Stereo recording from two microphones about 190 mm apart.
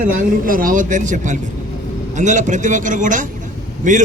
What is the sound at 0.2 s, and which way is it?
A man's voice, 45° right (ahead or behind).